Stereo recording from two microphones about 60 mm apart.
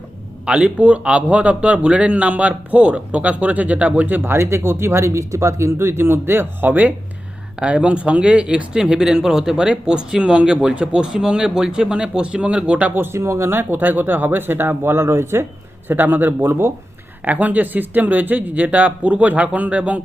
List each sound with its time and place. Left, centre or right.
0.4 s speech: centre
4.3 s speech: right
12.9 s speech: right
13.1 s speech: right
13.5 s speech: right
15.9 s speech: right
17.2 s speech: right